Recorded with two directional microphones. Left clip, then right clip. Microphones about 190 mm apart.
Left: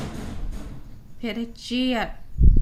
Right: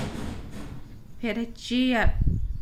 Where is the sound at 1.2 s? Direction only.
5° left (ahead or behind).